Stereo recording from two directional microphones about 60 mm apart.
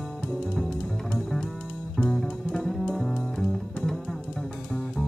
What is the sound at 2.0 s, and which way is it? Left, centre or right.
Music, centre.